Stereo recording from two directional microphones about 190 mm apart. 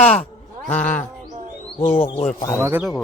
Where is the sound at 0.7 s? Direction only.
10° left (ahead or behind).